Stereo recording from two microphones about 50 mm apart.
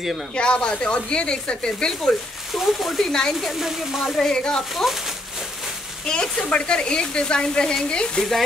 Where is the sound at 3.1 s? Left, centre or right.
Centre.